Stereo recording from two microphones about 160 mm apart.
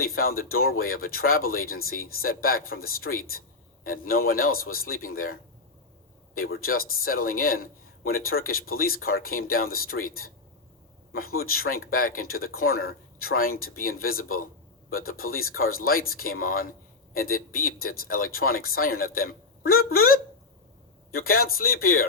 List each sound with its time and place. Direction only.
0.0 s a man's voice: 65° left (ahead or behind)